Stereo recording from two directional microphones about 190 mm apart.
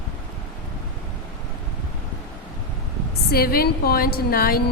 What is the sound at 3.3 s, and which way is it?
A woman's voice, 55° left (ahead or behind).